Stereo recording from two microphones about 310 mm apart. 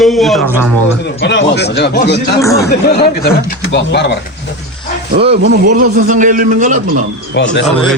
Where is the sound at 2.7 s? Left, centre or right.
Left.